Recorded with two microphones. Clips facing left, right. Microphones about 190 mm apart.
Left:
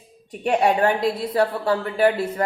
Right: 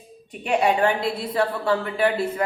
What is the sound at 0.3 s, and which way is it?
A woman's voice, 40° left (ahead or behind).